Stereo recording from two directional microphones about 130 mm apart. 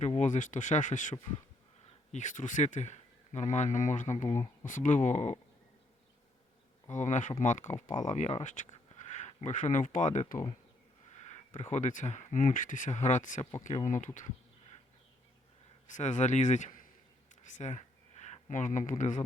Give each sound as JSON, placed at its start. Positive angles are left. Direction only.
{"t": 0.2, "sound": "speech", "side_deg": 75}
{"t": 6.8, "sound": "speech", "side_deg": 70}
{"t": 11.2, "sound": "speech", "side_deg": 60}
{"t": 15.9, "sound": "speech", "side_deg": 70}